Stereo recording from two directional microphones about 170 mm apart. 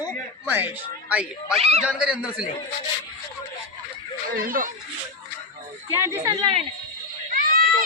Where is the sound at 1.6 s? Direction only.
40° right (ahead or behind).